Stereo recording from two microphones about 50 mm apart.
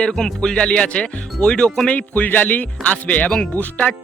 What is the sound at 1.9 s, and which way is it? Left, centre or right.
Speech, left.